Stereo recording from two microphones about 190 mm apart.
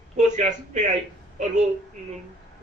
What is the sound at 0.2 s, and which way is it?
Speech, 40° right (ahead or behind).